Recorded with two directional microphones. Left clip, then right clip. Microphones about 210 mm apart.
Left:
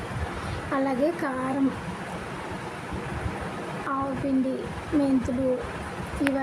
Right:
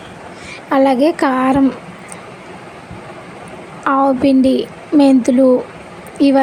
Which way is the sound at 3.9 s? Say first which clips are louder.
Right 16 dB; 40° right (ahead or behind).